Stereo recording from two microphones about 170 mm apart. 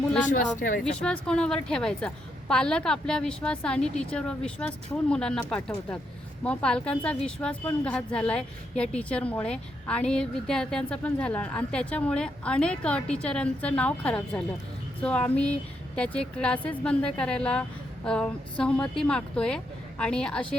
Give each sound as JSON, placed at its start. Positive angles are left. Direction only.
{"t": 0.3, "sound": "a woman's voice", "side_deg": 50}
{"t": 1.0, "sound": "a woman's voice", "side_deg": 5}